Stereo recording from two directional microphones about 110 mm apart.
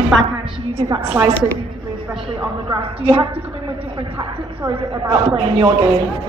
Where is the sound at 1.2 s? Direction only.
25° right (ahead or behind).